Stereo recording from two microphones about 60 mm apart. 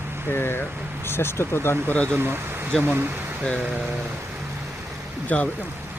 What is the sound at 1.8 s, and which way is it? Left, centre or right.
Speech, left.